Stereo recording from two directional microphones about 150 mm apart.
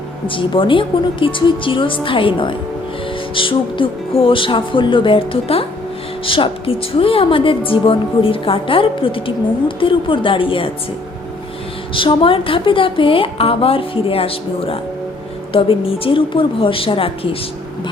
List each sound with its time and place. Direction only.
0.3 s a woman's voice: 35° left (ahead or behind)
11.9 s a woman's voice: 35° left (ahead or behind)